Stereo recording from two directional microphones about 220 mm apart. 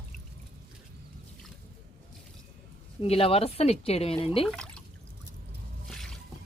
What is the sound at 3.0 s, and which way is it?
A woman's voice, 25° left (ahead or behind).